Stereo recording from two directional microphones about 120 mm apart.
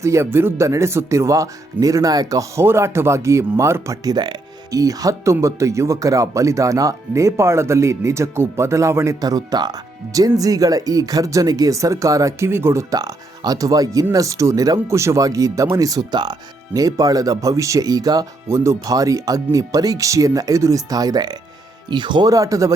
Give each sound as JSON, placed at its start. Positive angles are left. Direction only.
{"t": 0.0, "sound": "speech", "side_deg": -25}